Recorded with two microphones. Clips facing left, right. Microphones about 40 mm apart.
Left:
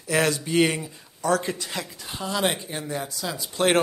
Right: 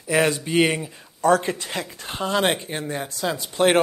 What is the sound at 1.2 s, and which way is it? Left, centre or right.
Speech, right.